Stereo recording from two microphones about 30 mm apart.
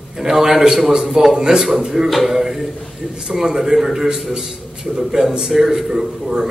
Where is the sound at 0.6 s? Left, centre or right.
Centre.